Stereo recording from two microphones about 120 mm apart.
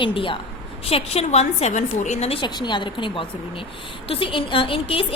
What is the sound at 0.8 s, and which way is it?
A woman's voice, 55° left (ahead or behind).